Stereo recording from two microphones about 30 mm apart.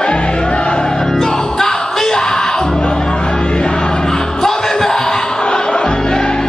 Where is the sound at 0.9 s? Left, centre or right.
Centre.